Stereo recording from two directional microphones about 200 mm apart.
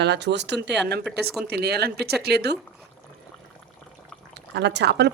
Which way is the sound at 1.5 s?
55° right (ahead or behind).